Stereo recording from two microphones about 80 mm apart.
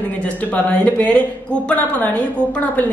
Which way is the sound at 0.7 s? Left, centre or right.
Centre.